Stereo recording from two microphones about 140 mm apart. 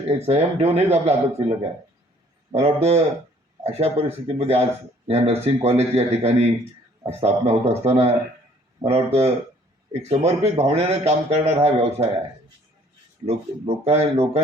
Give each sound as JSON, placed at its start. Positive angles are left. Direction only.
{"t": 0.3, "sound": "a man's voice", "side_deg": -45}
{"t": 13.2, "sound": "a man's voice", "side_deg": -45}